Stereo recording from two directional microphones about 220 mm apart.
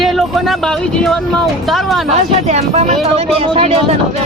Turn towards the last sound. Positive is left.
turn(degrees=-25)  # may be behind; listen again after turning